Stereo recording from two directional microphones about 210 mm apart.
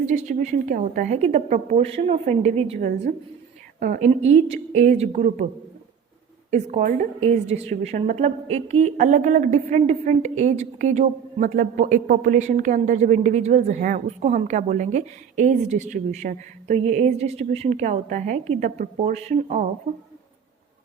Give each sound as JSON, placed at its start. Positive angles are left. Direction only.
{"t": 0.0, "sound": "a woman's voice", "side_deg": -35}
{"t": 6.5, "sound": "a woman's voice", "side_deg": -35}